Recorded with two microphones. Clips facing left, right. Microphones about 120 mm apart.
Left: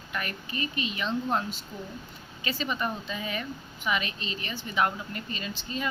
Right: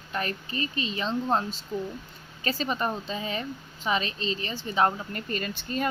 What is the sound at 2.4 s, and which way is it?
Speech, 40° right (ahead or behind).